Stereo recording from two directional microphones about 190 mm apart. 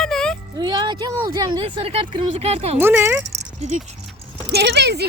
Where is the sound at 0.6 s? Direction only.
25° right (ahead or behind).